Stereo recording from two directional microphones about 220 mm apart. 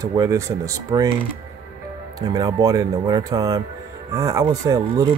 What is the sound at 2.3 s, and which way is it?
Speech, 15° right (ahead or behind).